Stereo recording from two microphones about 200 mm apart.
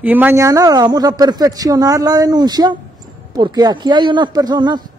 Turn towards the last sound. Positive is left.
turn(degrees=-20)  # may be behind; listen again after turning